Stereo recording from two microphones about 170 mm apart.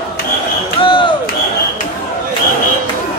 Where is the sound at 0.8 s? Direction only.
30° left (ahead or behind).